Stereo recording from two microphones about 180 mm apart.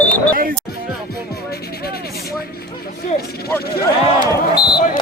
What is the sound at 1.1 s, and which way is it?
Music, 60° left (ahead or behind).